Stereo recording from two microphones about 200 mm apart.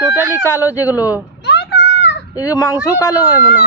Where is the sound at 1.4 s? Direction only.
55° left (ahead or behind).